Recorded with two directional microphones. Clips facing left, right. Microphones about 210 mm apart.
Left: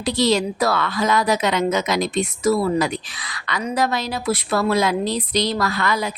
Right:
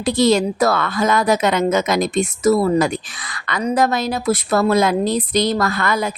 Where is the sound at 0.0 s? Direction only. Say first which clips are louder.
Right 4 dB; 50° right (ahead or behind).